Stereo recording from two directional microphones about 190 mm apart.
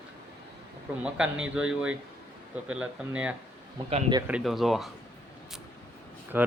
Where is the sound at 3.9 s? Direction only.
25° right (ahead or behind).